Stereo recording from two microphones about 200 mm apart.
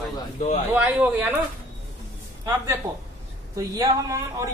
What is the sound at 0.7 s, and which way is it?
Speech, 10° right (ahead or behind).